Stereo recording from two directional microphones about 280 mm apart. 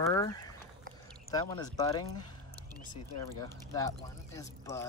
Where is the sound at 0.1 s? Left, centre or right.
Centre.